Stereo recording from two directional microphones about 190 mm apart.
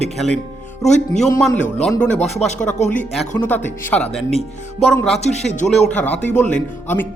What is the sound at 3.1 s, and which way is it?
Speech, 5° left (ahead or behind).